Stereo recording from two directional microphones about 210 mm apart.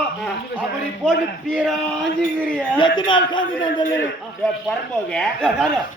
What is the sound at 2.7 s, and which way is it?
A man's voice, 20° left (ahead or behind).